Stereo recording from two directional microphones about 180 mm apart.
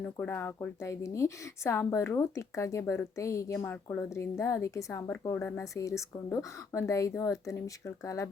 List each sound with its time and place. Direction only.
0.2 s a woman's voice: 10° left (ahead or behind)